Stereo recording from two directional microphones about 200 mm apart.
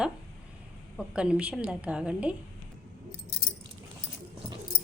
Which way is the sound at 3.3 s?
55° left (ahead or behind).